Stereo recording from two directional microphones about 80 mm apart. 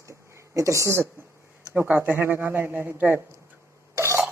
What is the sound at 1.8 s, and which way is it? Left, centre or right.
A woman's voice, right.